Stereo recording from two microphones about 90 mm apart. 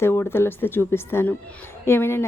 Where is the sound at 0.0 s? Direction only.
25° left (ahead or behind).